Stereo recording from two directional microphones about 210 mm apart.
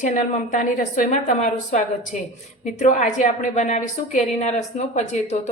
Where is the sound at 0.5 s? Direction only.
35° left (ahead or behind).